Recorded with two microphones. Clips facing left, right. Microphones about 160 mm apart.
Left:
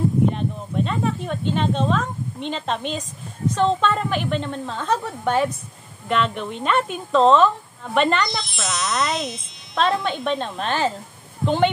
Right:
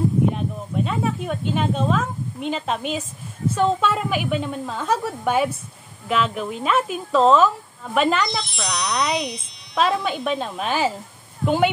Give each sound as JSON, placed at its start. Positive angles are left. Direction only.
{"t": 0.3, "sound": "a woman's voice", "side_deg": -5}